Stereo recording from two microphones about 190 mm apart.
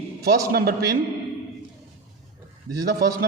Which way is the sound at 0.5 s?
55° right (ahead or behind).